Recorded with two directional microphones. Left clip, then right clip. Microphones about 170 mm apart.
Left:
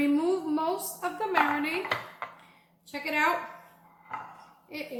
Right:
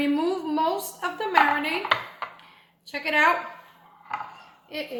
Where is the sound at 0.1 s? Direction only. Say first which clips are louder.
Right 2 dB; 35° right (ahead or behind).